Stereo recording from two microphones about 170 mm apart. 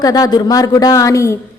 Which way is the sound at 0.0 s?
20° left (ahead or behind).